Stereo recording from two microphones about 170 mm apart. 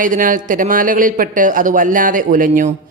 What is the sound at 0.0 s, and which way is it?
Speech, 50° right (ahead or behind).